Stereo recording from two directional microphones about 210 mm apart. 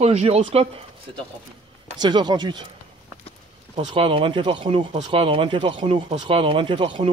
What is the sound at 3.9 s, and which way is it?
Speech, 25° right (ahead or behind).